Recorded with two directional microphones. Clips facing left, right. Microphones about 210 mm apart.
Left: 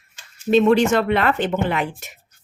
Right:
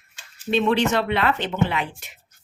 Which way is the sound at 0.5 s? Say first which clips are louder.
Left 5 dB; 45° left (ahead or behind).